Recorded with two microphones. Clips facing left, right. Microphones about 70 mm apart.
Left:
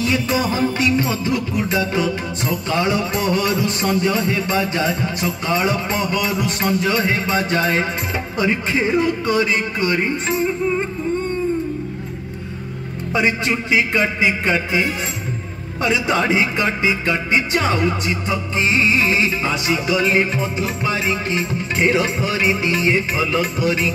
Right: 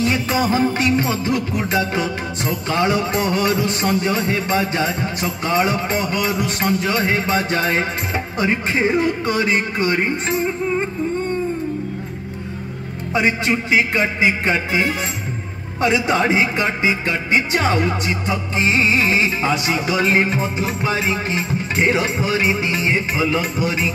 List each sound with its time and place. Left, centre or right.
0.0 s music: right
13.1 s speech: centre
18.6 s music: right
19.6 s music: right
20.8 s music: centre
22.0 s speech: centre